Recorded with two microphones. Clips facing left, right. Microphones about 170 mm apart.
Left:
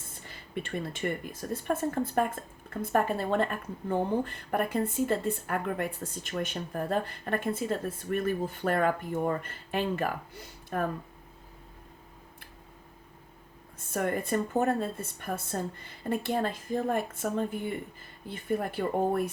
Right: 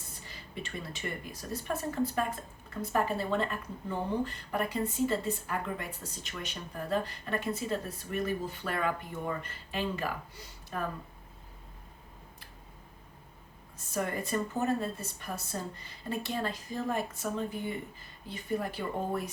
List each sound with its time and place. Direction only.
0.3 s speech: 55° left (ahead or behind)
13.9 s speech: 55° left (ahead or behind)